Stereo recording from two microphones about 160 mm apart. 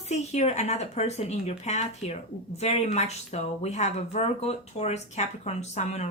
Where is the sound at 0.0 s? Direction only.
45° left (ahead or behind).